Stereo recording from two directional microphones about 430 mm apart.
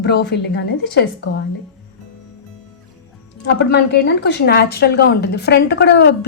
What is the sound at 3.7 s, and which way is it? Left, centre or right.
A woman's voice, left.